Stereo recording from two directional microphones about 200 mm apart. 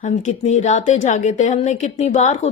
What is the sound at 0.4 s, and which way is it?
A woman's voice, 35° left (ahead or behind).